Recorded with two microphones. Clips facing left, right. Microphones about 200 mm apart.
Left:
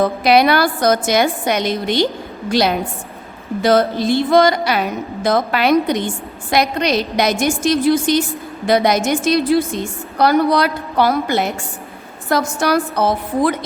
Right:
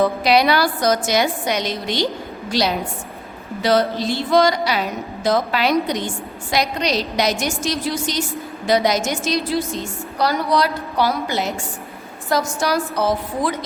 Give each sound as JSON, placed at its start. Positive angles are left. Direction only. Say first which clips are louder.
{"t": 0.2, "sound": "a woman's voice", "louder": "left 3 dB", "side_deg": 55}